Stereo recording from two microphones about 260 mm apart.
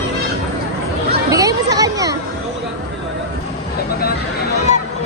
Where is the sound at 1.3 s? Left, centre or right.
Centre.